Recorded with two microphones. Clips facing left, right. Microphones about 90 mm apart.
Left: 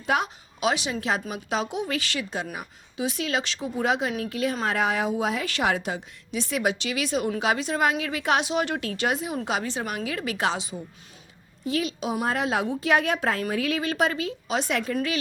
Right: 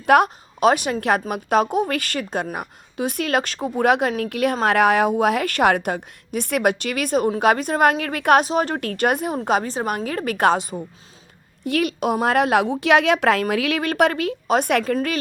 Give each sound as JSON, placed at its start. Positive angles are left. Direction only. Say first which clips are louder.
{"t": 0.0, "sound": "a woman's voice", "louder": "right 10 dB", "side_deg": -60}
{"t": 8.4, "sound": "a woman's voice", "louder": "right 4 dB", "side_deg": -40}
{"t": 11.6, "sound": "a woman's voice", "louder": "right 6 dB", "side_deg": -60}